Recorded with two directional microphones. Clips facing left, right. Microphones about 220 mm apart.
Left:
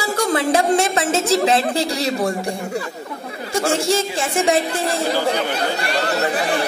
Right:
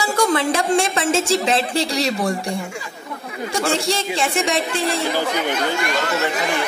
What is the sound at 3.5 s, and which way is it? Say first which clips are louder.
Speech: left 3 dB; 25° left (ahead or behind).